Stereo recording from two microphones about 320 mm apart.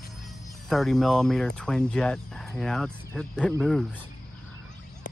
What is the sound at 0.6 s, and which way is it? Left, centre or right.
Speech, centre.